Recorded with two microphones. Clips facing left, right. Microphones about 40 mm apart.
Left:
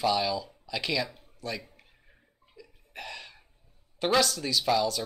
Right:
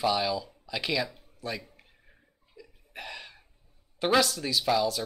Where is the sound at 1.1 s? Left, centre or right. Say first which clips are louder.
Even; centre.